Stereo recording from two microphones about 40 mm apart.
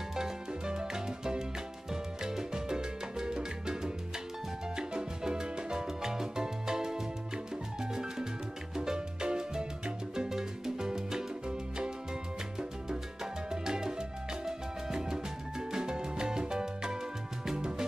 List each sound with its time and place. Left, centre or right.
0.1 s music: centre
1.9 s salsa music: centre
4.7 s music: centre
12.5 s salsa music: centre
15.7 s music: centre